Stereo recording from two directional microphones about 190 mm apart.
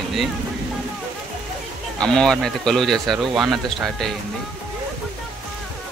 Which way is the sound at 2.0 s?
5° left (ahead or behind).